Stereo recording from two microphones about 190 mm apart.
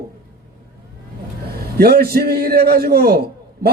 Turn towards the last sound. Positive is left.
turn(degrees=-55)  # may be behind; listen again after turning